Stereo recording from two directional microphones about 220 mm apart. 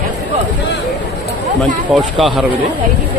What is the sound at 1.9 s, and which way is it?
Speech, centre (ahead or behind).